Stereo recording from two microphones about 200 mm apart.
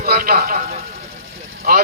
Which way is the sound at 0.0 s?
45° right (ahead or behind).